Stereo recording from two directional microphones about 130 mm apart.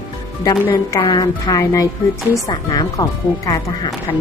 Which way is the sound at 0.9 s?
30° left (ahead or behind).